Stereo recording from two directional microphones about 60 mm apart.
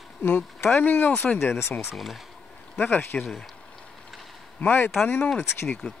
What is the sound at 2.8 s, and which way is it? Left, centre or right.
Speech, left.